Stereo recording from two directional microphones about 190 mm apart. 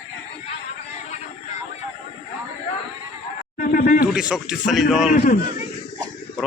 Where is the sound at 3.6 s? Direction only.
45° left (ahead or behind).